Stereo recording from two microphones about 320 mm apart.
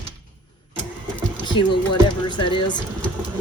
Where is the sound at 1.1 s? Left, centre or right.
Centre.